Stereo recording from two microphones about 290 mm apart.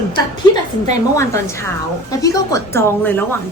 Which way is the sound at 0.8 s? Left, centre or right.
Centre.